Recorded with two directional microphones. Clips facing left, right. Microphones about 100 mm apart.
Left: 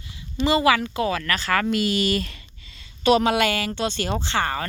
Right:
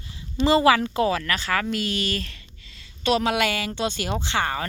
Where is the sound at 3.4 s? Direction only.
10° right (ahead or behind).